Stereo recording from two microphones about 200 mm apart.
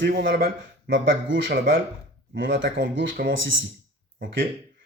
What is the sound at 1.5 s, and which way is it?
Speech, 50° right (ahead or behind).